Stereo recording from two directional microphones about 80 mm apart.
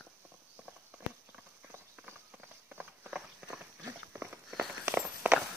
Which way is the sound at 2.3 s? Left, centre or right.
Centre.